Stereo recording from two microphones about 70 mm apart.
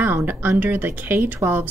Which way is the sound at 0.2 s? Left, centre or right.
Right.